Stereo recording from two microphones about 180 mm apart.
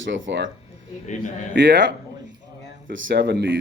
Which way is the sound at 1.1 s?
40° left (ahead or behind).